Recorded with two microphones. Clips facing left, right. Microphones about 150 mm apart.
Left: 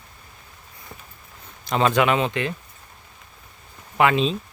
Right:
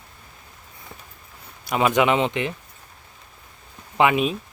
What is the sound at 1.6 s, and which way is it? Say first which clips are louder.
Speech: even; 10° right (ahead or behind).